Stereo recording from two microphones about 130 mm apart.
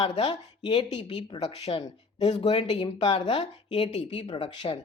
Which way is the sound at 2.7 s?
35° left (ahead or behind).